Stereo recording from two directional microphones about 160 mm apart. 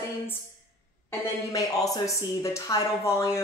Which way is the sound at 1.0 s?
20° left (ahead or behind).